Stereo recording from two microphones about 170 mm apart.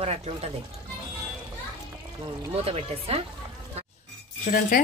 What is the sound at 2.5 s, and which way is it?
Speech, 35° right (ahead or behind).